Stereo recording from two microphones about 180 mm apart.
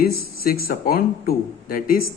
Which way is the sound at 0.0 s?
55° left (ahead or behind).